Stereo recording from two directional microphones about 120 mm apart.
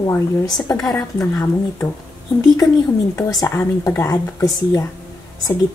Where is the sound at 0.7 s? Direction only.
25° left (ahead or behind).